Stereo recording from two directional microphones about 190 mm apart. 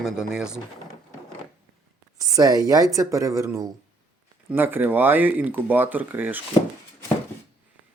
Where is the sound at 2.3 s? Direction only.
20° right (ahead or behind).